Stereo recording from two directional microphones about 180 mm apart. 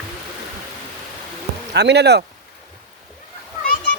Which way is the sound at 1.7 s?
70° right (ahead or behind).